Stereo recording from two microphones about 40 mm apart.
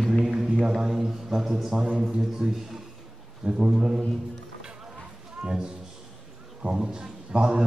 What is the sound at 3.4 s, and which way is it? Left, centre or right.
Speech, right.